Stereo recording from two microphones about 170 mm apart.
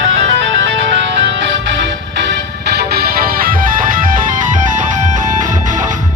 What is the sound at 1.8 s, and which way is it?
Music, 90° right.